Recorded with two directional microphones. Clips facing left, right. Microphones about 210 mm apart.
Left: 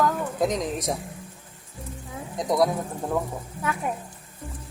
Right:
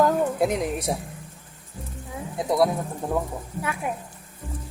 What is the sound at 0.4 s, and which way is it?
Speech, 10° right (ahead or behind).